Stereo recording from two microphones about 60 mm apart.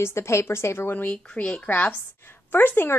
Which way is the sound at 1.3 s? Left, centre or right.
Centre.